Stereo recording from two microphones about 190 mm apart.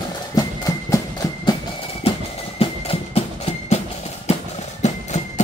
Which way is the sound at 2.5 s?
30° left (ahead or behind).